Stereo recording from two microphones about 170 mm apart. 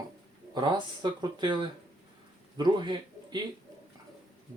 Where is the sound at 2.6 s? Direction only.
25° right (ahead or behind).